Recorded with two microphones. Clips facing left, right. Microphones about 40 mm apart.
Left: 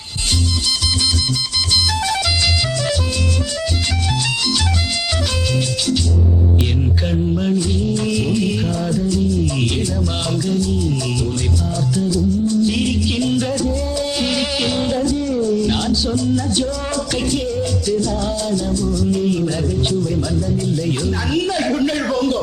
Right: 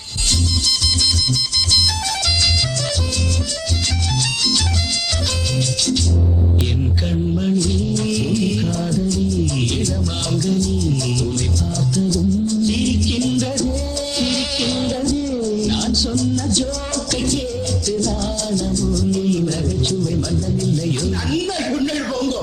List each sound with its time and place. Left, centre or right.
7.1 s music: centre
11.9 s music: centre